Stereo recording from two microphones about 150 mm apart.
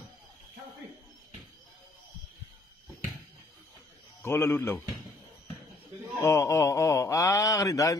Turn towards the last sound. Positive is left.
turn(degrees=20)  # may be behind; listen again after turning